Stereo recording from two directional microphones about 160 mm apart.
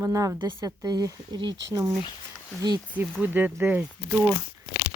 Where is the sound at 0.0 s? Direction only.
20° right (ahead or behind).